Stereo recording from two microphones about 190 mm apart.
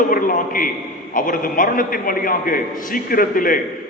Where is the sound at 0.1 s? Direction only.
45° left (ahead or behind).